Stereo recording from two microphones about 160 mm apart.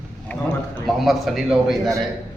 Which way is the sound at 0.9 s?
Centre (ahead or behind).